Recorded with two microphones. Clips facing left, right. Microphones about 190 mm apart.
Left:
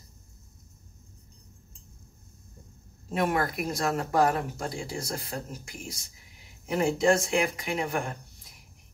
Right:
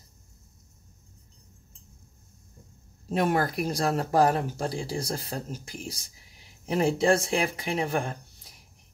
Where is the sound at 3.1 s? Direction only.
30° right (ahead or behind).